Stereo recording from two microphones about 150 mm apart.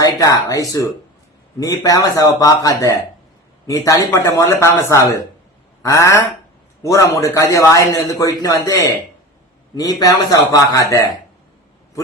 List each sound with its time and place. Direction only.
0.0 s a man's voice: 20° left (ahead or behind)